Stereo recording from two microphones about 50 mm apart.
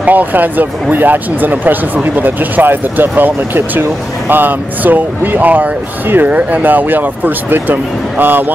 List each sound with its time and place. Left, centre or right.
0.0 s speech: right